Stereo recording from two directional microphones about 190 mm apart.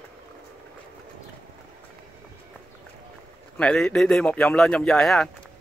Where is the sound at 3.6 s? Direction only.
5° left (ahead or behind).